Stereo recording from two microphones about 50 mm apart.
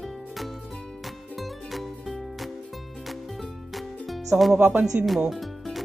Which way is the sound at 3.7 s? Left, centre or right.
Centre.